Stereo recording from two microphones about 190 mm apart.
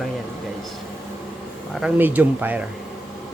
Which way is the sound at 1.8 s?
10° right (ahead or behind).